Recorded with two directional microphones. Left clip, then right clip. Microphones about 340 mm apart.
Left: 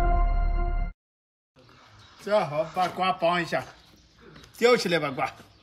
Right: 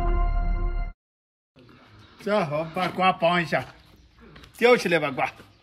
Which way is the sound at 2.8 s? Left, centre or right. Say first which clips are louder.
Right 3 dB; centre.